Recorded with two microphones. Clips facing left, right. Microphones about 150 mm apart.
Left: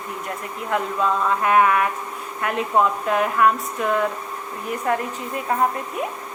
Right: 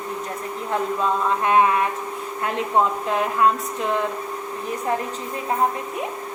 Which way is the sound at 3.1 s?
25° right (ahead or behind).